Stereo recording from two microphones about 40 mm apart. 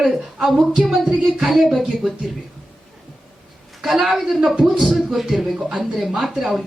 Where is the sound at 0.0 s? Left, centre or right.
Centre.